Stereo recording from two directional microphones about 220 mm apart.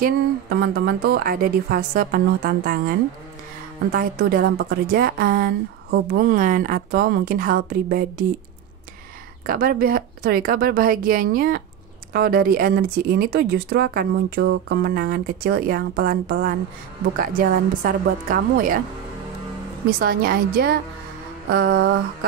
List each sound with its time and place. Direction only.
0.0 s a woman's voice: 45° right (ahead or behind)
9.5 s a woman's voice: 40° right (ahead or behind)
20.0 s speech: 40° right (ahead or behind)